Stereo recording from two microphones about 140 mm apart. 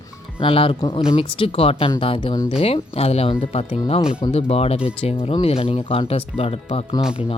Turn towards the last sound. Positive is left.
turn(degrees=-5)  # may be behind; listen again after turning